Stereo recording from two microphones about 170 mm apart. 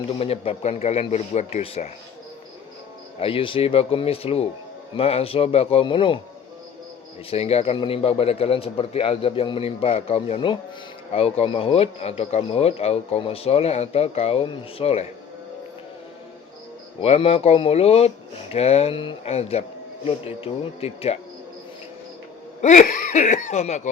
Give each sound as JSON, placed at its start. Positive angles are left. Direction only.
{"t": 0.2, "sound": "speech", "side_deg": 35}
{"t": 3.2, "sound": "speech", "side_deg": 30}
{"t": 7.3, "sound": "speech", "side_deg": 35}
{"t": 17.0, "sound": "speech", "side_deg": 35}
{"t": 22.6, "sound": "speech", "side_deg": 50}